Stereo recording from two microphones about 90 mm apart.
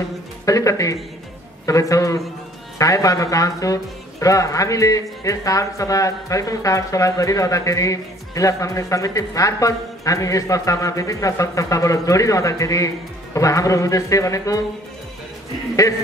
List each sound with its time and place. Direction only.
0.5 s speech: 40° left (ahead or behind)